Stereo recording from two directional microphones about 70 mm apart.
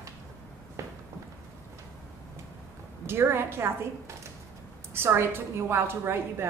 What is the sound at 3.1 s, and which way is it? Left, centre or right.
Speech, right.